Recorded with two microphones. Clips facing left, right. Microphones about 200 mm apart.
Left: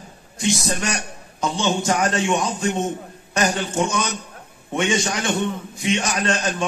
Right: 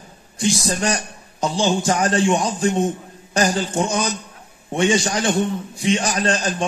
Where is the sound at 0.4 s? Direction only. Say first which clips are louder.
Right 2 dB; 30° right (ahead or behind).